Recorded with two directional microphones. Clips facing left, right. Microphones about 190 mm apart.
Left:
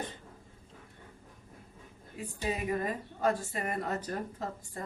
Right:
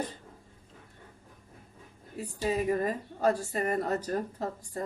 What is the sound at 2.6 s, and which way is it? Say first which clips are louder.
A woman's voice: right 4 dB; 40° right (ahead or behind).